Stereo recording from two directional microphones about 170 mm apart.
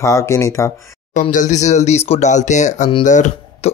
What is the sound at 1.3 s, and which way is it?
Speech, 45° left (ahead or behind).